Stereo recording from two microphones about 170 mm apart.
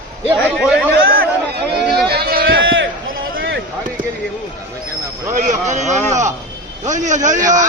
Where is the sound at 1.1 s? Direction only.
65° right (ahead or behind).